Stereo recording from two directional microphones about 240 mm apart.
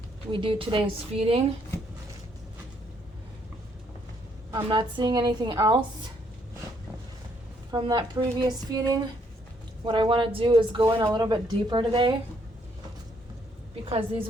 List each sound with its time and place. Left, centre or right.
0.3 s speech: right
4.5 s speech: centre
7.7 s a woman's voice: centre